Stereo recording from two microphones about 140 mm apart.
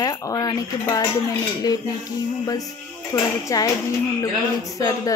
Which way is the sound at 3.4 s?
25° left (ahead or behind).